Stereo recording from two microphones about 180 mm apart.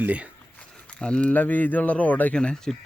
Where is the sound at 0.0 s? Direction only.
10° right (ahead or behind).